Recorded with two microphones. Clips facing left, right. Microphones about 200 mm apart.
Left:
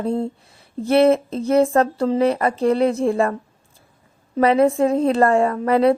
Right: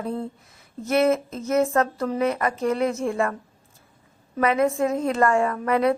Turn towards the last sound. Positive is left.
turn(degrees=30)  # may be behind; listen again after turning